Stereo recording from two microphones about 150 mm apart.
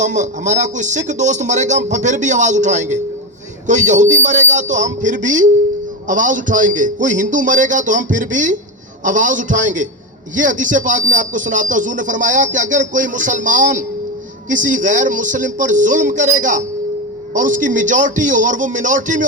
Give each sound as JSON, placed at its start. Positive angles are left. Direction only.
{"t": 0.0, "sound": "speech", "side_deg": -55}